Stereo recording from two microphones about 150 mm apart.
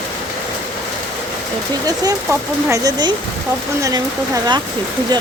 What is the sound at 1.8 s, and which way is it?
Speech, 25° right (ahead or behind).